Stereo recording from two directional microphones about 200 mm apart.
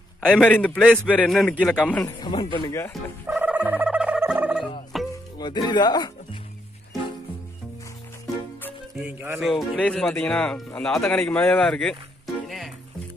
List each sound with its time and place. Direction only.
0.3 s speech: 5° left (ahead or behind)
2.1 s speech: 25° left (ahead or behind)
3.3 s a sound: 10° right (ahead or behind)
4.9 s music: centre (ahead or behind)
5.4 s speech: 20° left (ahead or behind)
8.9 s speech: 10° right (ahead or behind)
12.4 s music: centre (ahead or behind)